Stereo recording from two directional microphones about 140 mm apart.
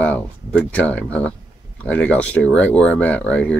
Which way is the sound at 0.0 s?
10° left (ahead or behind).